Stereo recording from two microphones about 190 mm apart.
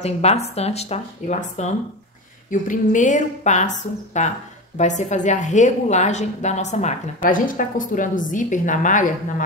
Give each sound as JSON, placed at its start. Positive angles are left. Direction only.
{"t": 0.0, "sound": "a woman's voice", "side_deg": 35}
{"t": 2.7, "sound": "a woman's voice", "side_deg": 40}